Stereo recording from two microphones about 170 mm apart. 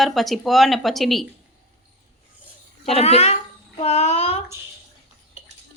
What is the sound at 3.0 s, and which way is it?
Child singing, 40° left (ahead or behind).